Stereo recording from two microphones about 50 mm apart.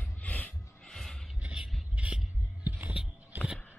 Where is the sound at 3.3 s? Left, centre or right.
Right.